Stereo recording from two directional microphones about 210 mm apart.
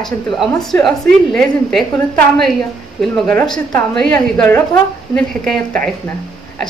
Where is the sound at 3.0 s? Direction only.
5° left (ahead or behind).